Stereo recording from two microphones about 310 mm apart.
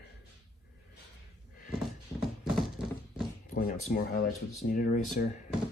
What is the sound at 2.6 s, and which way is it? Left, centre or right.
Music, centre.